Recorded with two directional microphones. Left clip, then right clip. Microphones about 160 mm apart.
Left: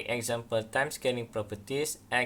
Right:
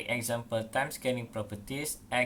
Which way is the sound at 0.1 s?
35° left (ahead or behind).